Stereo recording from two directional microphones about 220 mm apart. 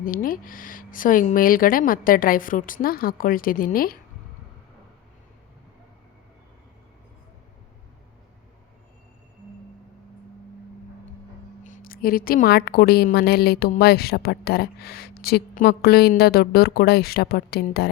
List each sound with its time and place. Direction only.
0.0 s speech: 40° left (ahead or behind)
11.6 s a woman's voice: 35° left (ahead or behind)